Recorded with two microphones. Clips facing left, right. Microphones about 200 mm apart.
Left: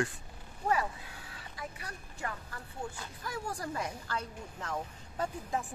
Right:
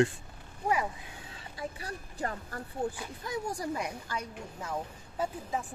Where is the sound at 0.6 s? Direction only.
15° right (ahead or behind).